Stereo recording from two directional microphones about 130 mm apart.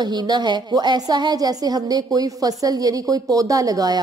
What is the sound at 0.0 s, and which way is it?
A woman's voice, 35° right (ahead or behind).